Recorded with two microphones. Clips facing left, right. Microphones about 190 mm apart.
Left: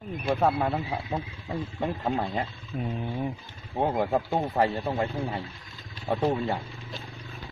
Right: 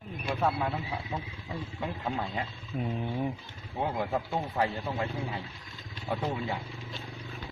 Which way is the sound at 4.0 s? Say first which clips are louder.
Left 5 dB; 50° left (ahead or behind).